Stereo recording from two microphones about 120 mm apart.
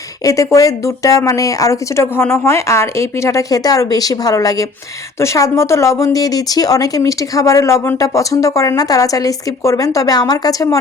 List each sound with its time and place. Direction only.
0.3 s speech: 30° left (ahead or behind)